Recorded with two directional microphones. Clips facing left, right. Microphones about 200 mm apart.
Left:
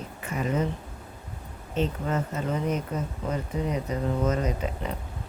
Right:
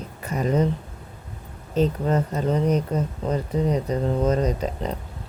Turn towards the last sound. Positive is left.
turn(degrees=-35)  # may be behind; listen again after turning